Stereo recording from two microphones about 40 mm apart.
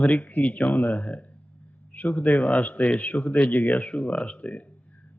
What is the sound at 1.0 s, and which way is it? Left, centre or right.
A man's voice, left.